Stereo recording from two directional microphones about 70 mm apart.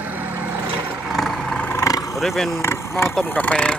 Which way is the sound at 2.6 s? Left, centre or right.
Left.